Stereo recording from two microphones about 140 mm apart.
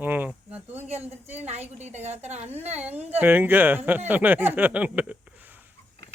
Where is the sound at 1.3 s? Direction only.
50° right (ahead or behind).